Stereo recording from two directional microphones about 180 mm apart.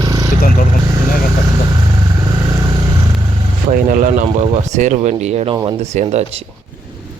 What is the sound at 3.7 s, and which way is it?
Speech, 50° right (ahead or behind).